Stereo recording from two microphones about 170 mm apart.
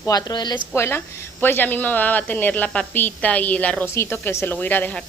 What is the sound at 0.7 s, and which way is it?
Speech, 15° left (ahead or behind).